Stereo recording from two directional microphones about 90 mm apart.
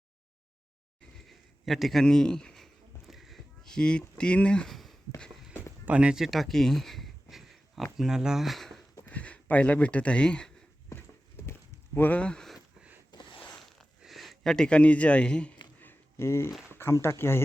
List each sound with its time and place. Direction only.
1.3 s a man's voice: centre (ahead or behind)
3.1 s a sound: centre (ahead or behind)
4.2 s speech: 15° left (ahead or behind)
5.8 s a sound: 15° right (ahead or behind)
7.9 s speech: 5° right (ahead or behind)
9.0 s speech: 15° left (ahead or behind)
10.9 s horse: 25° left (ahead or behind)
11.9 s speech: 20° left (ahead or behind)
13.1 s zipper: 55° left (ahead or behind)
13.5 s a sound: 5° left (ahead or behind)
15.8 s a sound: 25° left (ahead or behind)
16.7 s speech: 30° left (ahead or behind)